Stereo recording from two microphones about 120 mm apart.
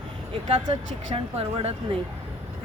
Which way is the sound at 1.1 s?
55° right (ahead or behind).